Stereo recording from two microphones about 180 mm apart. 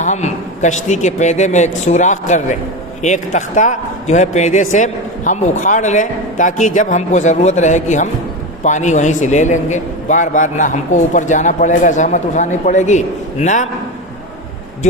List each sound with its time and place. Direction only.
0.0 s a man's voice: 40° left (ahead or behind)